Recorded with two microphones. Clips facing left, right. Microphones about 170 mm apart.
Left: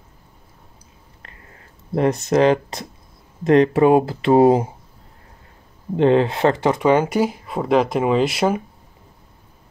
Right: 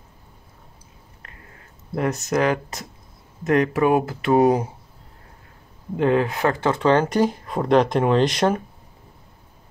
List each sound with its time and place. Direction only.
2.0 s speech: 25° left (ahead or behind)
5.9 s speech: 25° left (ahead or behind)
6.7 s speech: 10° left (ahead or behind)